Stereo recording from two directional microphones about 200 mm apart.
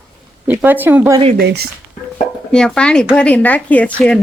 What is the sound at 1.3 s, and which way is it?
Speech, 55° right (ahead or behind).